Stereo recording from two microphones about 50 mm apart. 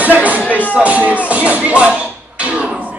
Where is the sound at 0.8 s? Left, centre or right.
Right.